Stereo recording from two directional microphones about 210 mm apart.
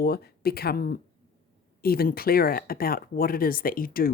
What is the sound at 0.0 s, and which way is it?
Speech, 50° left (ahead or behind).